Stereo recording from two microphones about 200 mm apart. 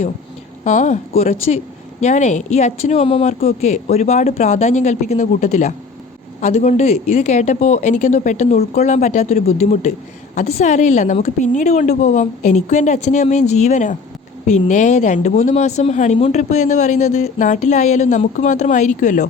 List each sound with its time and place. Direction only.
0.6 s speech: 40° left (ahead or behind)